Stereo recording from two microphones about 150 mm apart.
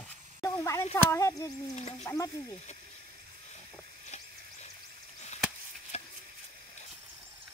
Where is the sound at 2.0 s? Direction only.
20° left (ahead or behind).